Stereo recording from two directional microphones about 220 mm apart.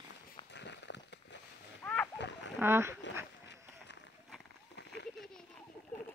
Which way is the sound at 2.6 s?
10° right (ahead or behind).